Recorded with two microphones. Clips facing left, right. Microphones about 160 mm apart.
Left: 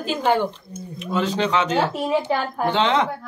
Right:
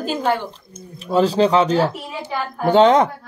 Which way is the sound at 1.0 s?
35° right (ahead or behind).